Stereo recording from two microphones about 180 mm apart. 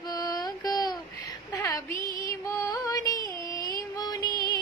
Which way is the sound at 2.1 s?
20° left (ahead or behind).